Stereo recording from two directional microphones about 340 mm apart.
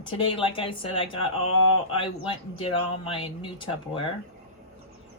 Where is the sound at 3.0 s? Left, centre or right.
Centre.